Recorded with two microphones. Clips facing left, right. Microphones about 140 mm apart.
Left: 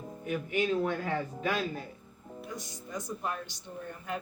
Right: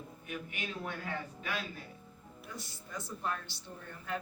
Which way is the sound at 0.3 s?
40° left (ahead or behind).